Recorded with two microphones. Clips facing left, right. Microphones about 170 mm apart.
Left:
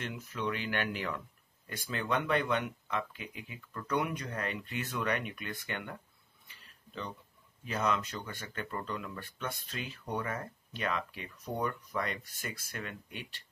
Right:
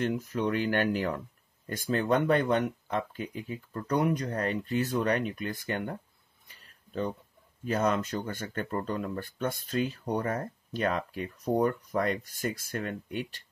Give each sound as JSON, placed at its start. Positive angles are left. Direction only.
{"t": 0.1, "sound": "speech", "side_deg": -45}